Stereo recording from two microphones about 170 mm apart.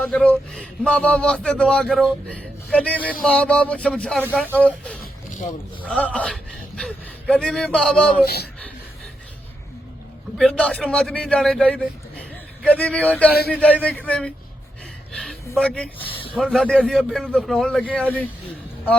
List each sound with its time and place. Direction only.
0.0 s speech: 10° left (ahead or behind)
8.2 s speech: 70° left (ahead or behind)
10.3 s speech: 5° left (ahead or behind)
15.1 s a sound: 5° left (ahead or behind)
15.4 s speech: 5° left (ahead or behind)
16.0 s a sound: 30° left (ahead or behind)
16.3 s speech: centre (ahead or behind)